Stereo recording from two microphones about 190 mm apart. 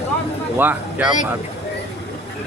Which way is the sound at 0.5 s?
10° right (ahead or behind).